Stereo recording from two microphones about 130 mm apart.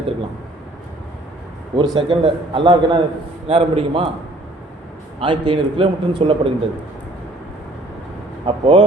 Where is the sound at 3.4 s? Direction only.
50° right (ahead or behind).